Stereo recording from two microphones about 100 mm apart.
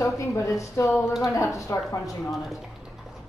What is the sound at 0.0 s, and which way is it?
Speech, 30° left (ahead or behind).